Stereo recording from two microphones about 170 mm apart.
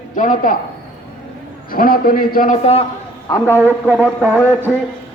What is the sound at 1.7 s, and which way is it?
Speech, 60° left (ahead or behind).